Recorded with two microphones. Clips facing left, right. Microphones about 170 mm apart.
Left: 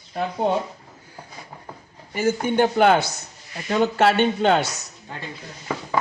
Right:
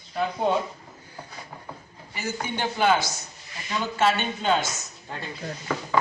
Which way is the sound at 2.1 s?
50° left (ahead or behind).